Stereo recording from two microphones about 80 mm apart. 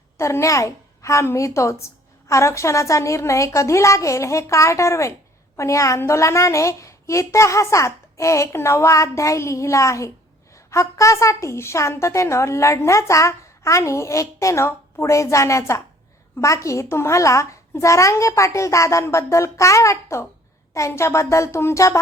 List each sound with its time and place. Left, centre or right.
0.2 s a woman's voice: left